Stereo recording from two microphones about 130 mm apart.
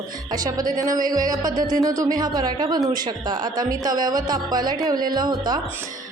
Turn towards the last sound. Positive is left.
turn(degrees=-30)  # may be behind; listen again after turning